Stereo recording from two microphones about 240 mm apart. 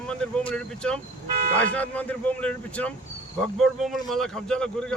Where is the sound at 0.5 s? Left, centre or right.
Centre.